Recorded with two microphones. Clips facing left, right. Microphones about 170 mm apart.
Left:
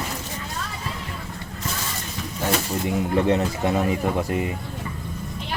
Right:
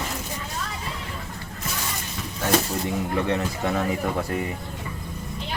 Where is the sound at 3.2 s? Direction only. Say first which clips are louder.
Left 6 dB; 25° left (ahead or behind).